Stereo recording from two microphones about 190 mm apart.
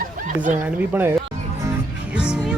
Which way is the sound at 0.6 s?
10° right (ahead or behind).